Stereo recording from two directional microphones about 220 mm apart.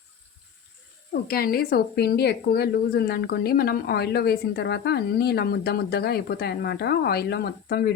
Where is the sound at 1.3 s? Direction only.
45° left (ahead or behind).